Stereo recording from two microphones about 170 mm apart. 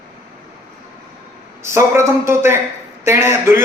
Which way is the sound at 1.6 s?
15° right (ahead or behind).